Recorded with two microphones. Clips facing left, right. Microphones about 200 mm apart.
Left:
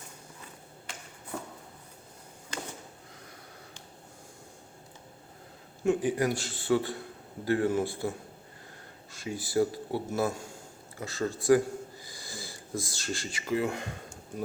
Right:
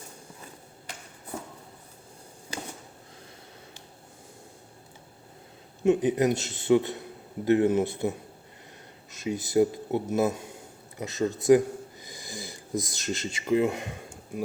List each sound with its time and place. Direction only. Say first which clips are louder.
5.8 s speech: right 4 dB; 20° right (ahead or behind)